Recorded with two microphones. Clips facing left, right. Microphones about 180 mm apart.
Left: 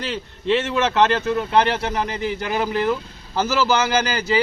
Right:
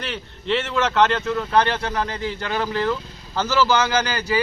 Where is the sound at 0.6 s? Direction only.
25° left (ahead or behind).